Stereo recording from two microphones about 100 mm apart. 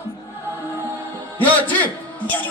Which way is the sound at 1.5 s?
15° left (ahead or behind).